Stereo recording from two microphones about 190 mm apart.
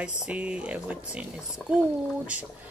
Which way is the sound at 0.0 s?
5° right (ahead or behind).